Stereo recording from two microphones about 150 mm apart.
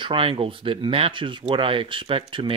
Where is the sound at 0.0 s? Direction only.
35° right (ahead or behind).